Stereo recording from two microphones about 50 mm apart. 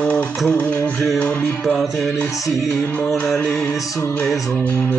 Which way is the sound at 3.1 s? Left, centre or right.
Centre.